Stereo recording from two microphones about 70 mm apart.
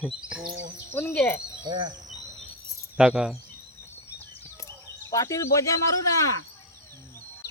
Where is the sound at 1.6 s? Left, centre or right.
Right.